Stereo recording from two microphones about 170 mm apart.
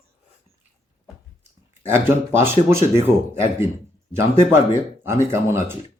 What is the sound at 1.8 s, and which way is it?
Speech, 15° right (ahead or behind).